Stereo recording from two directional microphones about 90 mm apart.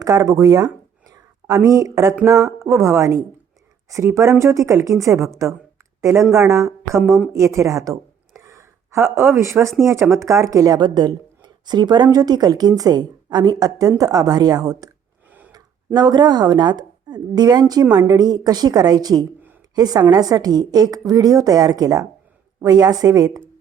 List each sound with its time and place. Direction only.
0.0 s a woman's voice: 40° right (ahead or behind)
10.8 s a woman's voice: 55° right (ahead or behind)
15.3 s gasp: 20° right (ahead or behind)
15.5 s a woman's voice: 50° right (ahead or behind)